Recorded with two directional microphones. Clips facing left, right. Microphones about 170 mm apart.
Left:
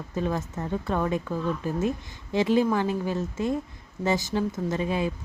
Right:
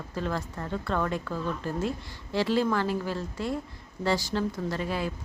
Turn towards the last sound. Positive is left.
turn(degrees=20)  # may be behind; listen again after turning